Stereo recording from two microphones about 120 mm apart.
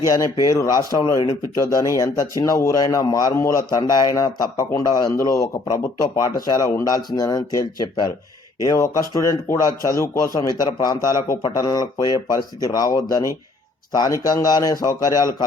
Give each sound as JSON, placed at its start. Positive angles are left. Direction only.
{"t": 0.0, "sound": "speech", "side_deg": 30}